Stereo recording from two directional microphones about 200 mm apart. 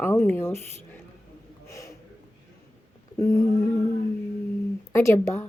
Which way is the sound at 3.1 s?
15° left (ahead or behind).